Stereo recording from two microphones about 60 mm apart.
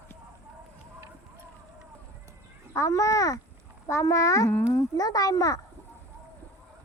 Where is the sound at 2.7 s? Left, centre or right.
Left.